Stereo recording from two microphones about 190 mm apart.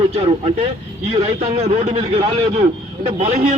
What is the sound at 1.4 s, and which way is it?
Speech, 35° right (ahead or behind).